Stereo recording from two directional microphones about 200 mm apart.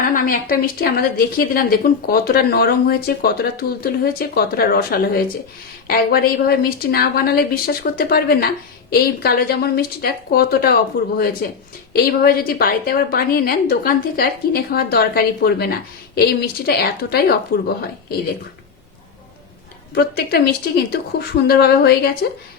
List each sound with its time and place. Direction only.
0.0 s a woman's voice: 45° left (ahead or behind)
19.9 s a woman's voice: 50° left (ahead or behind)